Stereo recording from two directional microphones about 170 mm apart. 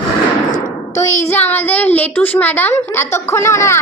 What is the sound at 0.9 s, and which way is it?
A woman's voice, 15° left (ahead or behind).